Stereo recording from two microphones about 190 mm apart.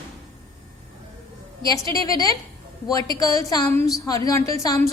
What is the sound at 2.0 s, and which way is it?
A woman's voice, 20° left (ahead or behind).